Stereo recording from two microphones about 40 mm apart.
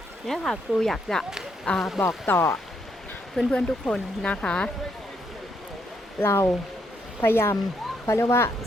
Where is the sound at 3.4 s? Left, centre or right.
Centre.